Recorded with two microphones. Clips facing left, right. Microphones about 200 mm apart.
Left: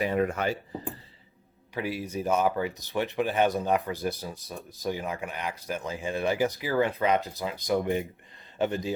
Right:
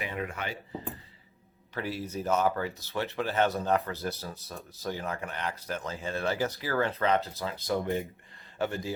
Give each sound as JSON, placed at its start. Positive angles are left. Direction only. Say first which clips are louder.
{"t": 0.0, "sound": "speech", "louder": "left 9 dB", "side_deg": 45}
{"t": 1.7, "sound": "a man's voice", "louder": "left 3 dB", "side_deg": 15}